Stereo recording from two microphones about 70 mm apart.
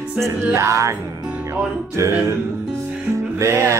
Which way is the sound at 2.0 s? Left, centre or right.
Right.